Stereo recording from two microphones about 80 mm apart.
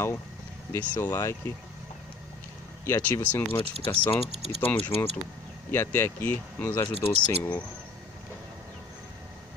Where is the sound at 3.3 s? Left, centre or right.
Left.